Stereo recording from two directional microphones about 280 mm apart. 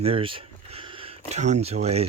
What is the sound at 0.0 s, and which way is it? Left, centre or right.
Speech, centre.